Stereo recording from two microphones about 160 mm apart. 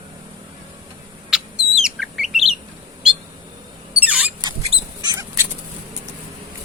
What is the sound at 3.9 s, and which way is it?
Rodents, 10° right (ahead or behind).